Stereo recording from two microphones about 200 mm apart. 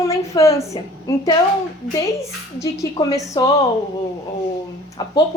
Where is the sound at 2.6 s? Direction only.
15° left (ahead or behind).